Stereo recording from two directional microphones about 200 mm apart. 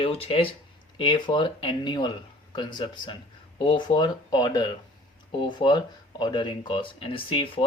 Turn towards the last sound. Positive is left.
turn(degrees=25)  # may be behind; listen again after turning